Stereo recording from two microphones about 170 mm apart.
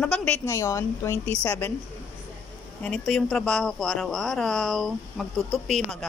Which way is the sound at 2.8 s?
5° left (ahead or behind).